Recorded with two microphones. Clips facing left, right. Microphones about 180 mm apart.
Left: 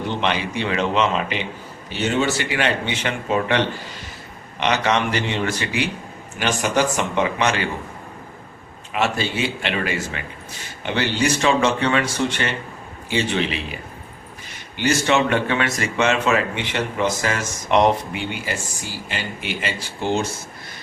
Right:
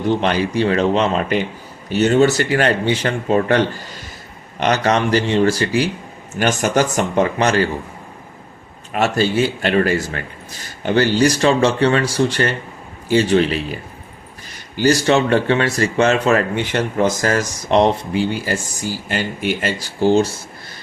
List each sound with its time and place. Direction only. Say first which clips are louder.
0.2 s speech: right 5 dB; 40° right (ahead or behind)
4.6 s speech: right 4 dB; 45° right (ahead or behind)
8.9 s speech: right 5 dB; 45° right (ahead or behind)
14.8 s speech: right 4 dB; 35° right (ahead or behind)
19.0 s speech: right 8 dB; 45° right (ahead or behind)